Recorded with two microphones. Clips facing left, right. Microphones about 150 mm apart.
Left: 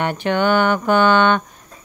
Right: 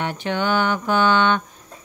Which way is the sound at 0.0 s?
60° left (ahead or behind).